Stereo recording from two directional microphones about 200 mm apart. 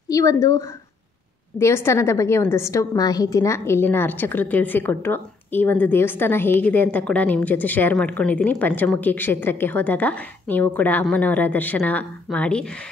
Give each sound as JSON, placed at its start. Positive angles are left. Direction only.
{"t": 0.1, "sound": "a woman's voice", "side_deg": 15}